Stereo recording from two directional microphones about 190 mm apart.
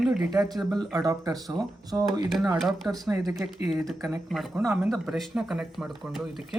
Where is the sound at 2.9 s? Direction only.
20° right (ahead or behind).